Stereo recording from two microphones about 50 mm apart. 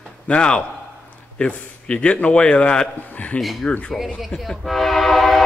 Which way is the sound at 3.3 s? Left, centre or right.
Centre.